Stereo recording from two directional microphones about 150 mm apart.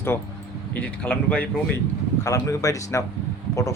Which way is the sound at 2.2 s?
20° left (ahead or behind).